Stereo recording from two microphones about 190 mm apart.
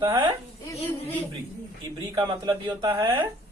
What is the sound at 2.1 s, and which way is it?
A man's voice, 20° right (ahead or behind).